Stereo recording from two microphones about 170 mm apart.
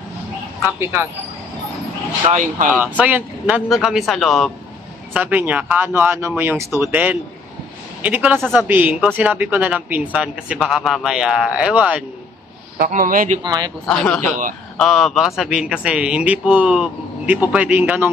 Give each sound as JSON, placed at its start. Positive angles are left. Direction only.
{"t": 0.7, "sound": "speech", "side_deg": -15}
{"t": 2.3, "sound": "speech", "side_deg": -50}
{"t": 2.7, "sound": "a man's voice", "side_deg": -10}
{"t": 5.1, "sound": "speech", "side_deg": -10}
{"t": 12.7, "sound": "speech", "side_deg": -55}
{"t": 13.4, "sound": "speech", "side_deg": -25}
{"t": 13.8, "sound": "a man's voice", "side_deg": 5}
{"t": 14.2, "sound": "speech", "side_deg": -50}
{"t": 14.8, "sound": "a man's voice", "side_deg": 0}